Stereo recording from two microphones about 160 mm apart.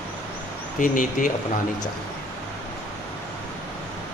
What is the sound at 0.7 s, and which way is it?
Speech, 55° left (ahead or behind).